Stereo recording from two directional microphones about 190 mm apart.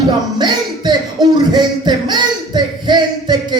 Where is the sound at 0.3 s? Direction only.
25° right (ahead or behind).